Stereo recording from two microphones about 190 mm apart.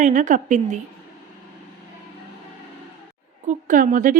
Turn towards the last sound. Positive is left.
turn(degrees=-45)  # may be behind; listen again after turning